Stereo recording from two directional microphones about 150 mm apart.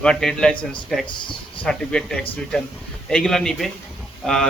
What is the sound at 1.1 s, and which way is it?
Speech, 35° left (ahead or behind).